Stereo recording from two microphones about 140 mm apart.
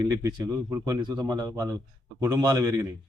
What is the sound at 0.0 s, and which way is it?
Speech, 25° right (ahead or behind).